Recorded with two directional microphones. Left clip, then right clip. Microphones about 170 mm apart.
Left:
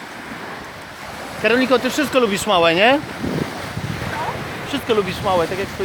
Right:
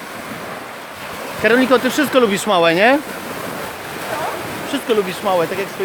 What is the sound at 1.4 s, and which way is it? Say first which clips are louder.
Speech: right 3 dB; 5° left (ahead or behind).